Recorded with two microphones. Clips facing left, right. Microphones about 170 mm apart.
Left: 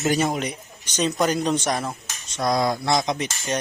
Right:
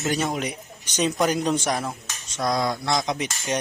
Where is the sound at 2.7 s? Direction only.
30° left (ahead or behind).